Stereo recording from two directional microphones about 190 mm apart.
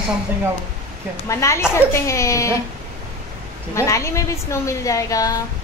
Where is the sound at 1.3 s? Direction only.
15° left (ahead or behind).